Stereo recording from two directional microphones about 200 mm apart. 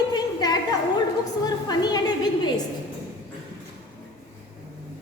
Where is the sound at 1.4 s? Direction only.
20° left (ahead or behind).